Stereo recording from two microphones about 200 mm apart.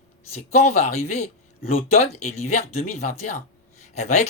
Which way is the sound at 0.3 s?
35° left (ahead or behind).